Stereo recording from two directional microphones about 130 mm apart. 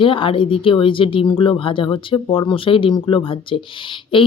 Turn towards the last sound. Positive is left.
turn(degrees=40)  # may be behind; listen again after turning